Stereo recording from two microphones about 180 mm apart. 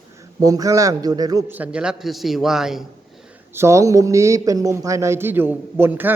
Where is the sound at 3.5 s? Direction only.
15° right (ahead or behind).